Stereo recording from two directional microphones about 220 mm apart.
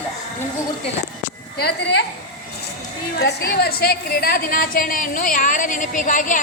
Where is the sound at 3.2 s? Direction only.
45° left (ahead or behind).